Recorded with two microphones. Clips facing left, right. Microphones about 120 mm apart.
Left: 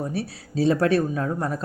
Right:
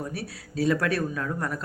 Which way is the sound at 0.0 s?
30° left (ahead or behind).